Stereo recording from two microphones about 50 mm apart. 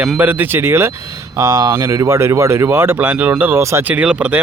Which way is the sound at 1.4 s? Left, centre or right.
Right.